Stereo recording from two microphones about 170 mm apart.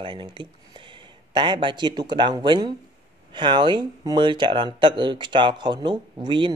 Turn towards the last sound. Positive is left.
turn(degrees=-25)  # may be behind; listen again after turning